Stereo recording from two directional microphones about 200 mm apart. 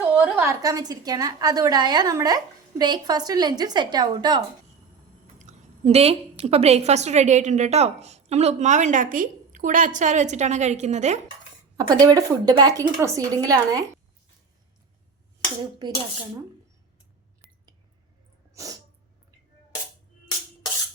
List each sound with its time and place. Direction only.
0.0 s a woman's voice: 10° right (ahead or behind)
5.4 s a woman's voice: 35° right (ahead or behind)
11.8 s a woman's voice: 20° right (ahead or behind)
18.5 s sneeze: 15° right (ahead or behind)